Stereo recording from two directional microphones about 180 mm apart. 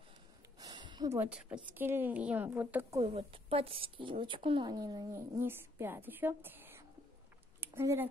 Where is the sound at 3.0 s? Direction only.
35° right (ahead or behind).